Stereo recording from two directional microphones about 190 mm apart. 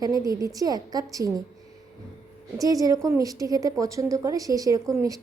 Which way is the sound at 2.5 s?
20° right (ahead or behind).